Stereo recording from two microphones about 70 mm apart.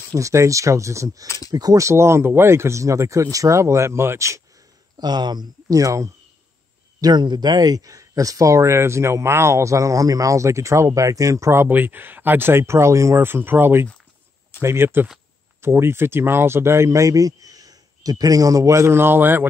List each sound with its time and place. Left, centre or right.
0.1 s speech: right
1.5 s speech: right
1.9 s speech: right
4.9 s speech: right
5.7 s speech: right
7.0 s speech: right
11.7 s speech: right
13.2 s speech: right